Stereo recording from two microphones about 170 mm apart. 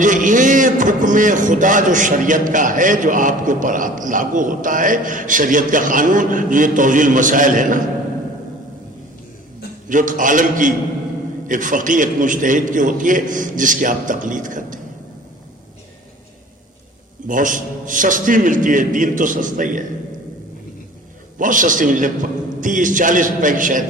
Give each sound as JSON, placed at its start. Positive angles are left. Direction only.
{"t": 0.0, "sound": "a man's voice", "side_deg": -50}
{"t": 9.9, "sound": "a man's voice", "side_deg": -50}
{"t": 17.2, "sound": "a man's voice", "side_deg": -50}
{"t": 21.3, "sound": "a man's voice", "side_deg": -50}